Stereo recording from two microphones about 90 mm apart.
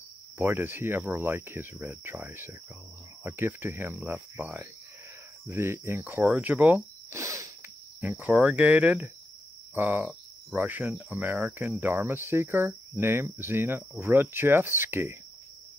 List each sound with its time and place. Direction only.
0.4 s cricket: 20° right (ahead or behind)
6.2 s speech: 15° right (ahead or behind)
7.1 s a sound: 35° right (ahead or behind)
8.0 s cricket: 20° right (ahead or behind)